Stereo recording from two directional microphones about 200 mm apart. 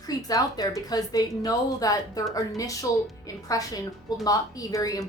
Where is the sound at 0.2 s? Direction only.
20° left (ahead or behind).